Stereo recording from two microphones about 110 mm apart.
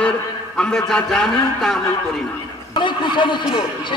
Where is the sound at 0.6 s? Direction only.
5° left (ahead or behind).